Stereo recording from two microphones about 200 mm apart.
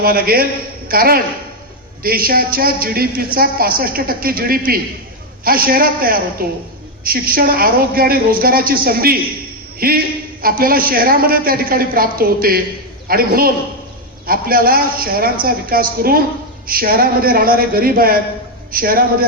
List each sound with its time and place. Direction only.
0.0 s a woman's voice: 50° right (ahead or behind)